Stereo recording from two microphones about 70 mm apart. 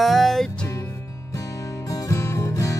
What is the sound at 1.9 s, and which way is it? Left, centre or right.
Music, left.